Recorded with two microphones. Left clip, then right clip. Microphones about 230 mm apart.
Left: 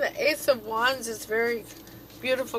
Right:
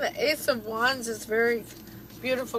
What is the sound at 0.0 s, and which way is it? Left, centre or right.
Speech, left.